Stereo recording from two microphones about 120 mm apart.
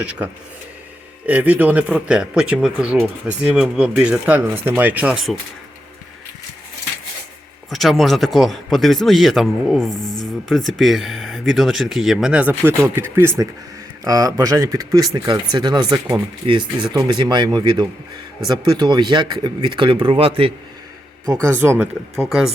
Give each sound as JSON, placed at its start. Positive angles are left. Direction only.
{"t": 0.0, "sound": "speech", "side_deg": -10}
{"t": 1.3, "sound": "speech", "side_deg": -10}
{"t": 7.7, "sound": "speech", "side_deg": 0}
{"t": 16.4, "sound": "speech", "side_deg": -45}
{"t": 21.5, "sound": "speech", "side_deg": -20}
{"t": 22.1, "sound": "speech", "side_deg": -5}